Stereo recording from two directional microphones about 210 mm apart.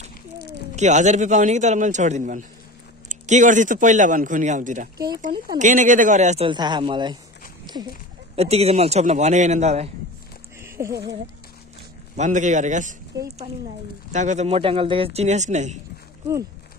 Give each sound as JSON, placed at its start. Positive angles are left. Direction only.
{"t": 0.7, "sound": "a man's voice", "side_deg": -35}
{"t": 6.5, "sound": "a man's voice", "side_deg": -20}
{"t": 10.6, "sound": "a sound", "side_deg": -15}
{"t": 12.2, "sound": "a man's voice", "side_deg": -35}
{"t": 13.1, "sound": "a woman's voice", "side_deg": -15}
{"t": 14.1, "sound": "a man's voice", "side_deg": -35}